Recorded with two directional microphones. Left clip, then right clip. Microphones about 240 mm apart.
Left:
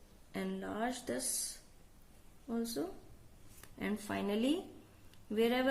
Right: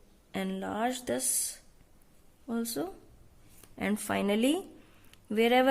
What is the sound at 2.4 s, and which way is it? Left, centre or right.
A woman's voice, right.